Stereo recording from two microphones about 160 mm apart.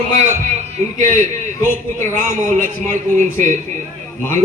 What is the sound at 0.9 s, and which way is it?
A man's voice, 55° right (ahead or behind).